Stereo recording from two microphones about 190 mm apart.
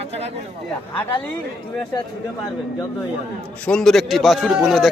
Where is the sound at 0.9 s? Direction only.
10° left (ahead or behind).